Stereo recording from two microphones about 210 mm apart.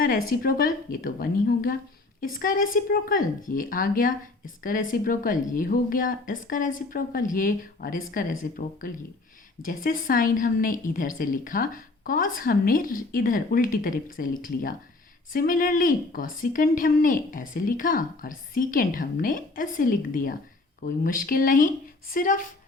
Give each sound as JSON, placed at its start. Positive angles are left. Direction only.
{"t": 0.3, "sound": "a woman's voice", "side_deg": 45}